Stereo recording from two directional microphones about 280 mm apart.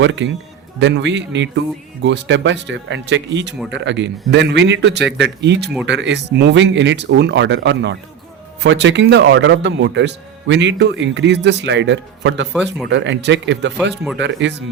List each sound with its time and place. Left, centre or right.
0.0 s speech: right